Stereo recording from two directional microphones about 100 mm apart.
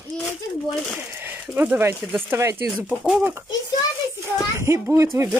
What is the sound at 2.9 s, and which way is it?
Speech, 10° right (ahead or behind).